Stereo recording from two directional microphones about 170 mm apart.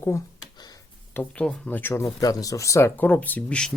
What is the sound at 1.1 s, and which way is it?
Speech, 10° left (ahead or behind).